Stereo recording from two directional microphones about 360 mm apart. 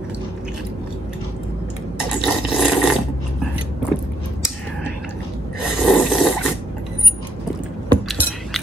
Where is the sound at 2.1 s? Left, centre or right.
Centre.